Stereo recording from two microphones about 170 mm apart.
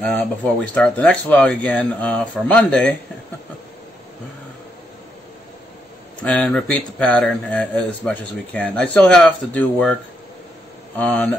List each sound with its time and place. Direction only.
0.0 s speech: 10° left (ahead or behind)
6.1 s speech: 5° left (ahead or behind)
11.0 s speech: 10° left (ahead or behind)